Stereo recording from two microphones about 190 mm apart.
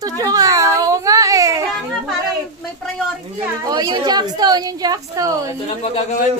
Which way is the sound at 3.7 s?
20° right (ahead or behind).